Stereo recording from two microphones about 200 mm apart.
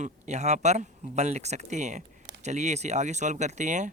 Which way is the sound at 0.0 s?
35° right (ahead or behind).